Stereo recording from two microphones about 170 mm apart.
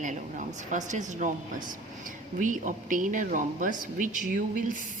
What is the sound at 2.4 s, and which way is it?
A woman's voice, 50° right (ahead or behind).